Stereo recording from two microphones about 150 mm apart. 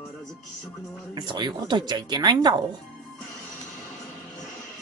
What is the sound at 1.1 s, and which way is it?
Speech, 30° right (ahead or behind).